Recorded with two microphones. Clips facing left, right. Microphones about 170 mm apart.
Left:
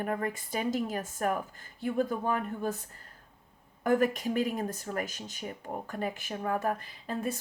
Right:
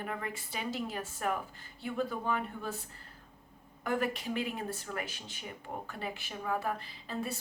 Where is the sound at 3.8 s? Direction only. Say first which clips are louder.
Left 6 dB; 45° left (ahead or behind).